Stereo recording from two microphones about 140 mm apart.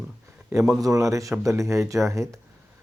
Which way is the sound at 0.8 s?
25° right (ahead or behind).